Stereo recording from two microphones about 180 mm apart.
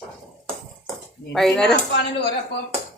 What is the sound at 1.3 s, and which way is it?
Speech, centre (ahead or behind).